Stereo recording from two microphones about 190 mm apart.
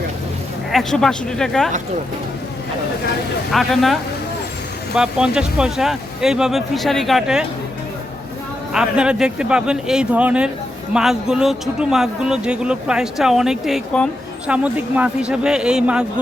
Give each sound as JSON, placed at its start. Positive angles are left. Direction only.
{"t": 0.7, "sound": "speech", "side_deg": 0}
{"t": 3.5, "sound": "speech", "side_deg": 0}
{"t": 4.9, "sound": "speech", "side_deg": -5}
{"t": 8.7, "sound": "speech", "side_deg": -5}